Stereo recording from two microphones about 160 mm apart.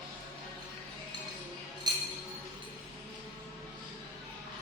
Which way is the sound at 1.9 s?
25° right (ahead or behind).